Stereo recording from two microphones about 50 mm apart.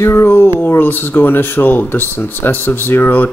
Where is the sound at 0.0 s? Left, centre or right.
Left.